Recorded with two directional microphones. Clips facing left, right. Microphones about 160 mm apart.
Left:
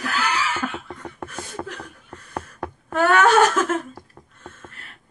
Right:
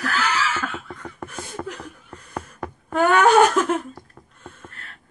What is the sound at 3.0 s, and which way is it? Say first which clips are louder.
Speech: right 1 dB; 15° right (ahead or behind).